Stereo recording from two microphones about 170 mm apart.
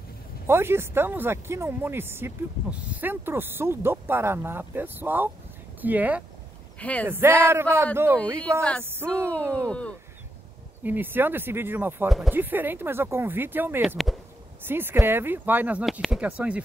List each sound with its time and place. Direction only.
0.5 s speech: 15° right (ahead or behind)
6.8 s speech: 10° left (ahead or behind)
7.1 s speech: 15° right (ahead or behind)
9.7 s speech: 5° left (ahead or behind)
10.8 s speech: 10° right (ahead or behind)
13.8 s speech: centre (ahead or behind)
14.6 s speech: 10° right (ahead or behind)